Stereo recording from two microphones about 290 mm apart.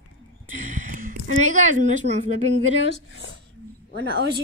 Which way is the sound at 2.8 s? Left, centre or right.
Left.